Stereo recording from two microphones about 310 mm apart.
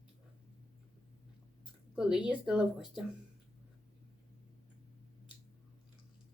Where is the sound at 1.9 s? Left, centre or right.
Centre.